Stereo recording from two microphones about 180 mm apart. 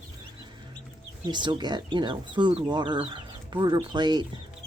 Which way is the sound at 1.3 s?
25° right (ahead or behind).